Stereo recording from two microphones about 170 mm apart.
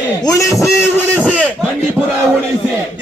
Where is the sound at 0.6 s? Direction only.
10° left (ahead or behind).